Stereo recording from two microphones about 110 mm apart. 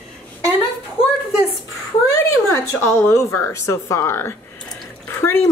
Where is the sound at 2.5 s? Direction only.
25° left (ahead or behind).